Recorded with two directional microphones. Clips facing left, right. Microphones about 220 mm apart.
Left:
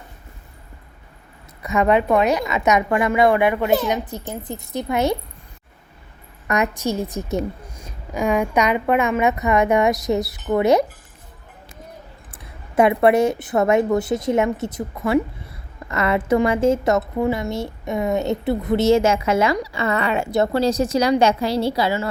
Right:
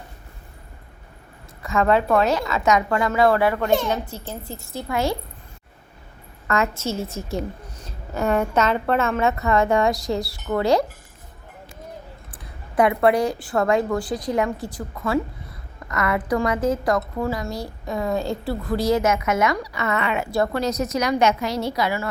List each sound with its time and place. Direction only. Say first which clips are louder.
1.6 s a woman's voice: left 2 dB; 20° left (ahead or behind)
6.5 s a woman's voice: left 2 dB; 15° left (ahead or behind)
12.3 s a woman's voice: left 1 dB; 25° left (ahead or behind)